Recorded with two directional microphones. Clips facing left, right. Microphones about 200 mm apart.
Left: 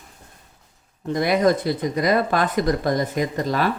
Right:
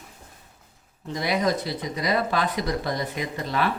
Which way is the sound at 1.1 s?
50° left (ahead or behind).